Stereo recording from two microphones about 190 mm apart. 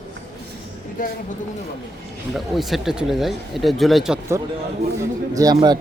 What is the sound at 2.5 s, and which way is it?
Speech, centre (ahead or behind).